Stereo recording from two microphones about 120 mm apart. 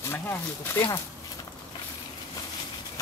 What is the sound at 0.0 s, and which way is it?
Speech, 20° left (ahead or behind).